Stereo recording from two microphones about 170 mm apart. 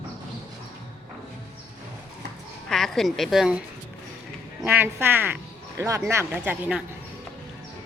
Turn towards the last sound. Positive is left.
turn(degrees=-10)  # may be behind; listen again after turning